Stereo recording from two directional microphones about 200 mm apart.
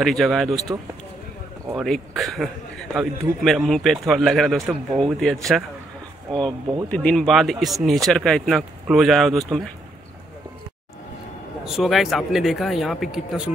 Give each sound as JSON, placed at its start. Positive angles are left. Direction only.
{"t": 0.0, "sound": "a man's voice", "side_deg": 0}
{"t": 1.8, "sound": "a man's voice", "side_deg": 0}
{"t": 11.6, "sound": "a man's voice", "side_deg": 0}